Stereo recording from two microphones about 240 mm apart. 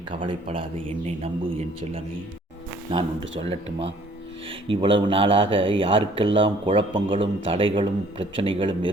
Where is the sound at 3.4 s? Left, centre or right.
Right.